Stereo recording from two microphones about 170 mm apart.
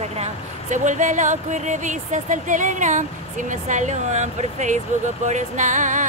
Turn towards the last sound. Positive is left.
turn(degrees=-50)  # may be behind; listen again after turning